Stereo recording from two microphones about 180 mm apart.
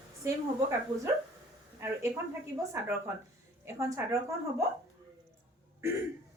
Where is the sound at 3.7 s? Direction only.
15° right (ahead or behind).